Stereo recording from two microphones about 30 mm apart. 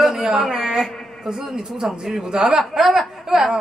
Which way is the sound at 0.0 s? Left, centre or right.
Centre.